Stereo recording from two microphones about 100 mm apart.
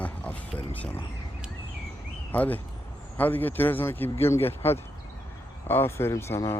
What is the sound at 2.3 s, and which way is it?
Speech, 15° left (ahead or behind).